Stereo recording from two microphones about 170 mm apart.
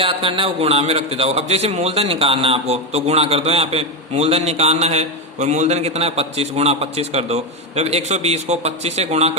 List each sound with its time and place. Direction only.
0.0 s a man's voice: 30° right (ahead or behind)